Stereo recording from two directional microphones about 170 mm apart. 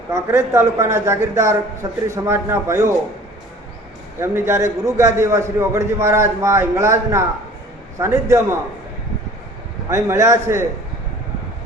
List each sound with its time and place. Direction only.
0.1 s a man's voice: 15° right (ahead or behind)
4.2 s a man's voice: 15° right (ahead or behind)
9.9 s a man's voice: 15° right (ahead or behind)